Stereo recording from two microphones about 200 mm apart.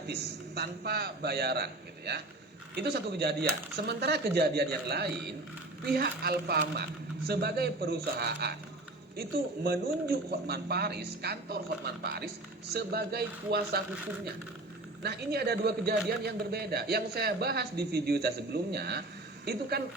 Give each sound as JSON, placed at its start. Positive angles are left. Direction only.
{"t": 0.1, "sound": "a man's voice", "side_deg": -55}
{"t": 9.6, "sound": "speech", "side_deg": -50}
{"t": 15.0, "sound": "speech", "side_deg": -55}